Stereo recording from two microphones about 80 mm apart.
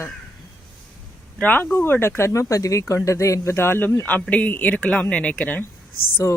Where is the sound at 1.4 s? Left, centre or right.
Centre.